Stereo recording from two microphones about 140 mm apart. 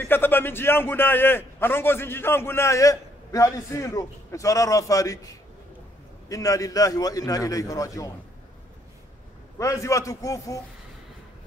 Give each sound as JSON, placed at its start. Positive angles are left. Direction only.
{"t": 0.0, "sound": "a man's voice", "side_deg": 15}
{"t": 9.6, "sound": "a man's voice", "side_deg": 20}